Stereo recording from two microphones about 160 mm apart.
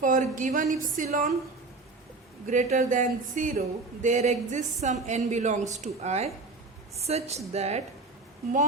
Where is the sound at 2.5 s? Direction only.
50° right (ahead or behind).